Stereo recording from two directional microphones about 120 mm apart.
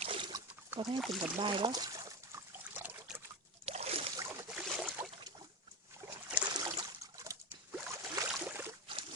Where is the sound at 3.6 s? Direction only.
60° right (ahead or behind).